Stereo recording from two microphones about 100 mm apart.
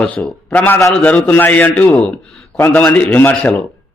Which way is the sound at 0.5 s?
20° left (ahead or behind).